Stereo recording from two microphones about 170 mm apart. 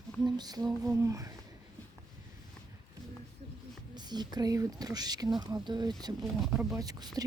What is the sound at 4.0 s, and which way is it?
Speech, 25° right (ahead or behind).